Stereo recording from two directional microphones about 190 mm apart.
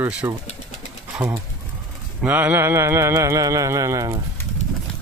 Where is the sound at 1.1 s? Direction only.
5° right (ahead or behind).